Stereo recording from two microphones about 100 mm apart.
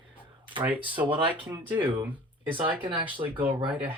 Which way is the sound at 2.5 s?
60° right (ahead or behind).